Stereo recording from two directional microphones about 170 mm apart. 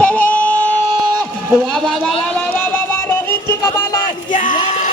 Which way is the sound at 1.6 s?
Centre (ahead or behind).